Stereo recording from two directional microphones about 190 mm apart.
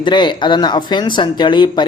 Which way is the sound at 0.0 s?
25° left (ahead or behind).